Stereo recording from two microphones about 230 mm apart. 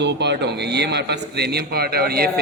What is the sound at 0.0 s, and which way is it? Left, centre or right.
A man's voice, right.